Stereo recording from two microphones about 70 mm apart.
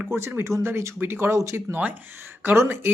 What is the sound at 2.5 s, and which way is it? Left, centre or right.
Speech, right.